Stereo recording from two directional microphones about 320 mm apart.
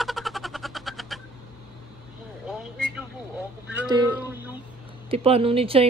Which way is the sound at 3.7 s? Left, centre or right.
Centre.